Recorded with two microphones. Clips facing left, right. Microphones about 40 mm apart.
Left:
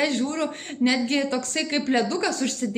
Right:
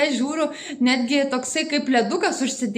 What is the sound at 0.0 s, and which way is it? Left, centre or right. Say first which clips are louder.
A woman's voice: right 3 dB; centre.